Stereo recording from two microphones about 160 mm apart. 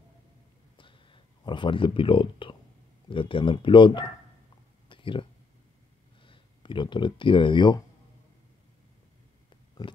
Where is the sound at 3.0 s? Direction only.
30° left (ahead or behind).